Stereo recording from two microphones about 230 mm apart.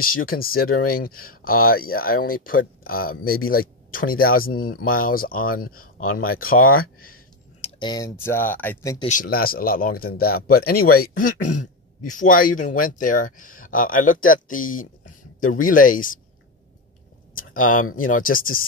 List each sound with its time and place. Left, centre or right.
0.0 s speech: left
7.6 s speech: centre
9.0 s speech: left
17.6 s speech: left